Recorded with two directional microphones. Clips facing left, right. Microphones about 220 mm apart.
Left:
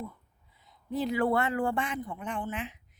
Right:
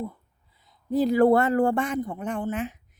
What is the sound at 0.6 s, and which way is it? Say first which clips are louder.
A man's voice: right 8 dB; 35° right (ahead or behind).